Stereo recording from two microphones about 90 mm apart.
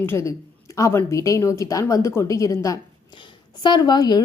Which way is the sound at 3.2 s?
55° left (ahead or behind).